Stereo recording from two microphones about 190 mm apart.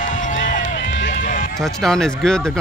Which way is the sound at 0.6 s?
80° left.